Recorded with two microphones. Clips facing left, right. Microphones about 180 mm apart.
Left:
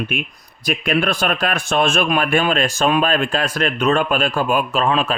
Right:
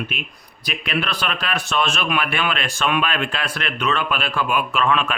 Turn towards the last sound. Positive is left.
turn(degrees=35)  # may be behind; listen again after turning